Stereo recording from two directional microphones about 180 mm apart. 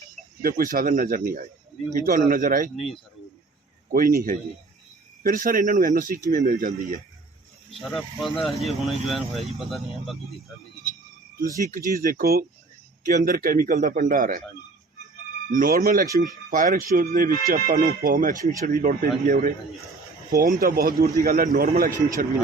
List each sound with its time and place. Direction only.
0.4 s speech: 50° right (ahead or behind)
3.9 s speech: 50° right (ahead or behind)
7.8 s speech: centre (ahead or behind)
11.9 s speech: 45° right (ahead or behind)
15.5 s speech: 50° right (ahead or behind)